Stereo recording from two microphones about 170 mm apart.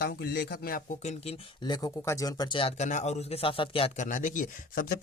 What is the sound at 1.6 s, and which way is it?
Speech, 25° left (ahead or behind).